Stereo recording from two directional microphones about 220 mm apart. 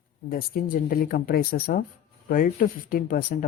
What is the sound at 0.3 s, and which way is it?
Speech, 40° left (ahead or behind).